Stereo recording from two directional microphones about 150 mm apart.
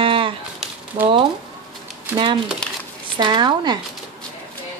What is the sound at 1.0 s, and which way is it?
Speech, 40° right (ahead or behind).